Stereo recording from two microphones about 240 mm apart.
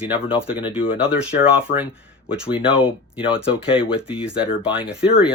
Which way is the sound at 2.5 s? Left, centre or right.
Left.